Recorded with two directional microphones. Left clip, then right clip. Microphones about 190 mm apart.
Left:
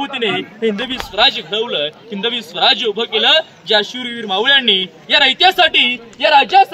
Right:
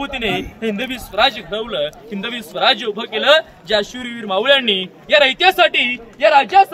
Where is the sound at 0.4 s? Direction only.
50° right (ahead or behind).